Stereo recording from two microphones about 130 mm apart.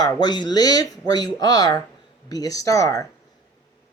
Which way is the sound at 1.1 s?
30° left (ahead or behind).